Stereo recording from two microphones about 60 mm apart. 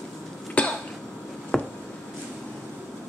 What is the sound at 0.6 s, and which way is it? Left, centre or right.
Cough, left.